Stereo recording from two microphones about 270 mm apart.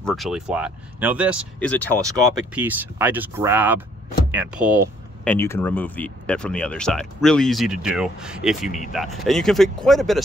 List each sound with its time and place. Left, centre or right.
0.0 s speech: centre
2.0 s speech: centre
5.3 s speech: centre
8.6 s speech: left
8.9 s speech: centre